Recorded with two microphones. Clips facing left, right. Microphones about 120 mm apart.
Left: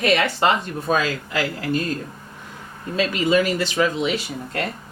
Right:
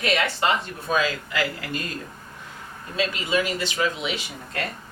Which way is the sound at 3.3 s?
45° left (ahead or behind).